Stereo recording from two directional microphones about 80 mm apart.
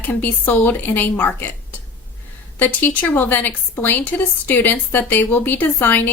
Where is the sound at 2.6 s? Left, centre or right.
Left.